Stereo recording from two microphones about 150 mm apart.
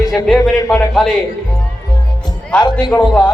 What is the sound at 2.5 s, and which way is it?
Speech, 10° left (ahead or behind).